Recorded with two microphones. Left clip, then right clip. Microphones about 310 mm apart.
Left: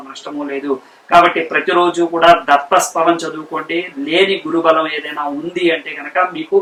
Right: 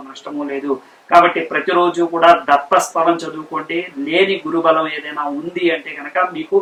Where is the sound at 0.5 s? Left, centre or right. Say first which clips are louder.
Left 1 dB; centre.